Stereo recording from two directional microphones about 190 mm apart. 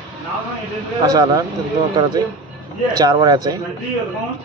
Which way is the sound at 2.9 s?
20° right (ahead or behind).